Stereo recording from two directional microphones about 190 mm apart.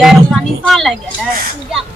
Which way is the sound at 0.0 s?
Centre (ahead or behind).